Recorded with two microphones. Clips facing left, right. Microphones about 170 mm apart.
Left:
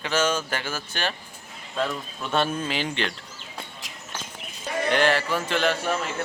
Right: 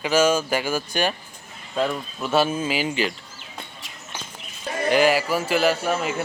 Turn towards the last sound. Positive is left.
turn(degrees=-5)  # may be behind; listen again after turning